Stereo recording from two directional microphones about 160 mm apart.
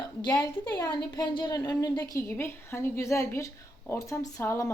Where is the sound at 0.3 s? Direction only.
25° left (ahead or behind).